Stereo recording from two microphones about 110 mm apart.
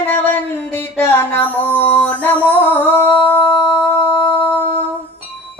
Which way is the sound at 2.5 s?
15° left (ahead or behind).